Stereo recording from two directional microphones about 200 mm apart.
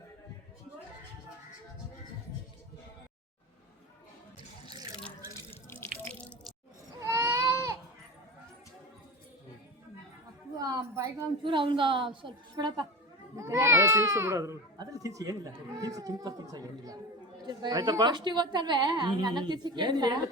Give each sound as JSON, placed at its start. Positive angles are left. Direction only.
{"t": 4.7, "sound": "water", "side_deg": -20}
{"t": 5.5, "sound": "drip", "side_deg": 10}
{"t": 7.0, "sound": "baby cry", "side_deg": -15}
{"t": 10.6, "sound": "a woman's voice", "side_deg": -15}